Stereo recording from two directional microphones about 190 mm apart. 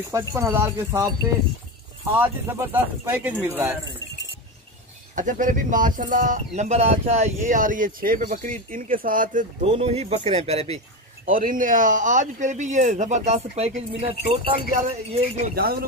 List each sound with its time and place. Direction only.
0.1 s speech: 15° right (ahead or behind)
2.1 s speech: 10° right (ahead or behind)
5.1 s speech: 45° right (ahead or behind)
11.2 s speech: 45° right (ahead or behind)
15.5 s speech: 55° right (ahead or behind)